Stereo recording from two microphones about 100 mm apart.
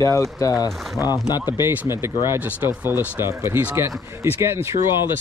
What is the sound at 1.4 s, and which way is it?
Speech, 15° right (ahead or behind).